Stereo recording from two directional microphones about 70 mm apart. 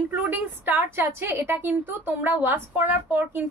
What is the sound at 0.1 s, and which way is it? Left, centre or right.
A woman's voice, right.